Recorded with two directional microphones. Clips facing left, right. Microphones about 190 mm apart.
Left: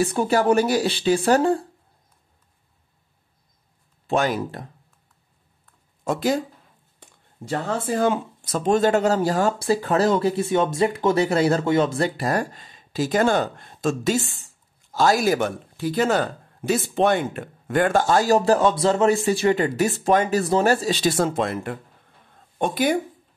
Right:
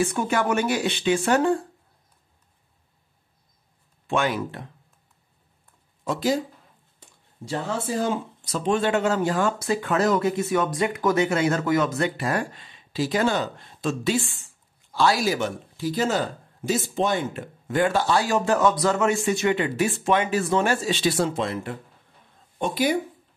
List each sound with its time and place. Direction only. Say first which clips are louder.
0.0 s speech: left 4 dB; 35° left (ahead or behind)
4.1 s speech: left 2 dB; 40° left (ahead or behind)
6.0 s speech: left 2 dB; 55° left (ahead or behind)